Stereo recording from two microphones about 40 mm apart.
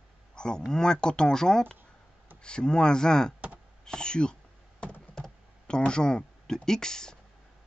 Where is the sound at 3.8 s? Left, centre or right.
Centre.